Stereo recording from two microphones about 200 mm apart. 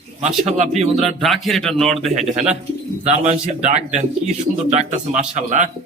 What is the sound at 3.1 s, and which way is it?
Speech, 35° right (ahead or behind).